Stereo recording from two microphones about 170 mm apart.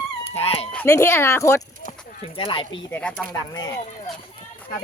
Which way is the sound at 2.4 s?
30° left (ahead or behind).